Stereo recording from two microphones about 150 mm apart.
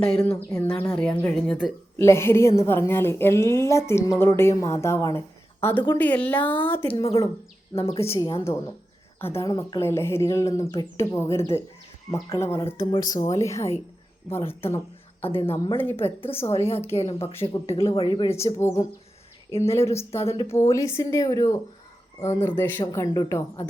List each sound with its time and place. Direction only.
0.0 s a woman's voice: 10° left (ahead or behind)
7.0 s speech: 40° left (ahead or behind)
8.0 s a woman's voice: 20° left (ahead or behind)
17.1 s speech: 40° left (ahead or behind)
18.3 s a woman's voice: 20° left (ahead or behind)
20.1 s speech: 40° left (ahead or behind)
20.5 s a woman's voice: 20° left (ahead or behind)
22.8 s speech: 25° left (ahead or behind)